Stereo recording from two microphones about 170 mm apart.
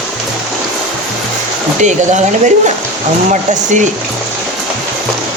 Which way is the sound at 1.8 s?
45° right (ahead or behind).